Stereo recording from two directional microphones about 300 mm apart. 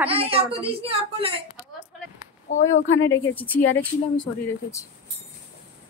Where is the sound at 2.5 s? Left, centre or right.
Left.